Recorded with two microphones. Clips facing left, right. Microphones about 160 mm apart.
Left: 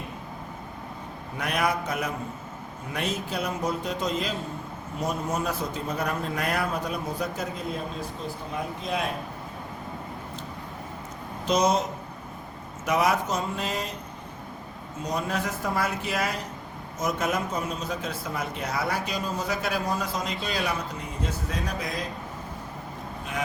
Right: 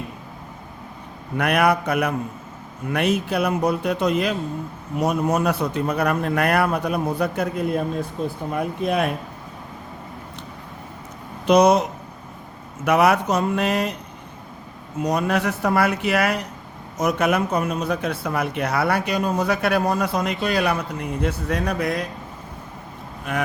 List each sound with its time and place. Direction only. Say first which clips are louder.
1.4 s a man's voice: right 8 dB; 65° right (ahead or behind)
11.4 s a man's voice: right 8 dB; 65° right (ahead or behind)
15.0 s a man's voice: right 8 dB; 70° right (ahead or behind)